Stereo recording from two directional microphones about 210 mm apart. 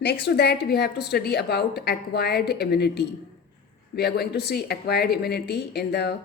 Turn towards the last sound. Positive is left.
turn(degrees=50)  # may be behind; listen again after turning